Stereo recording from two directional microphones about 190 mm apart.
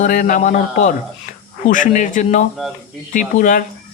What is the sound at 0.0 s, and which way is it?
A man's voice, 45° left (ahead or behind).